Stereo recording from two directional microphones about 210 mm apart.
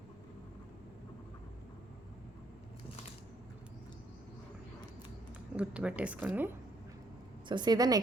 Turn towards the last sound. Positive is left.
turn(degrees=-20)  # may be behind; listen again after turning